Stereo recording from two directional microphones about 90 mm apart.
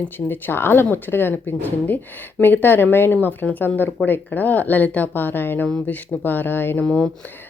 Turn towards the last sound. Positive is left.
turn(degrees=10)  # may be behind; listen again after turning